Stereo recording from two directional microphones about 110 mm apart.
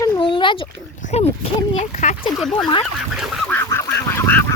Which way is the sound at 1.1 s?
80° left.